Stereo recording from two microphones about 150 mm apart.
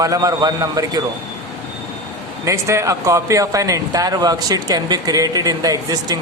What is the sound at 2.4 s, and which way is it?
Speech, 20° right (ahead or behind).